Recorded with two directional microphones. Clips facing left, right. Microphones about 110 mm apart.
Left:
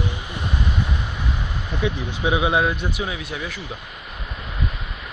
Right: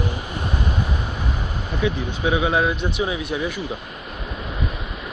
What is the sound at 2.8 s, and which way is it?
Speech, 20° right (ahead or behind).